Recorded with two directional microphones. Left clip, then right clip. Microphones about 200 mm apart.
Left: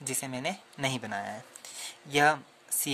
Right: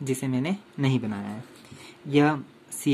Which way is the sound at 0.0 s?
30° left (ahead or behind).